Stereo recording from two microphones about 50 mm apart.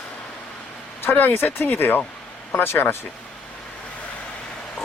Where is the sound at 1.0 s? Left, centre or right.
Left.